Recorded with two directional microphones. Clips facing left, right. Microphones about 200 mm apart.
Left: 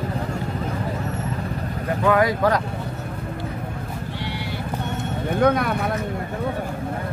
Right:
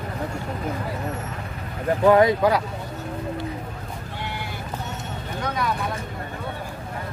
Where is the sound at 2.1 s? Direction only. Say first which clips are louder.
Right 3 dB; 25° right (ahead or behind).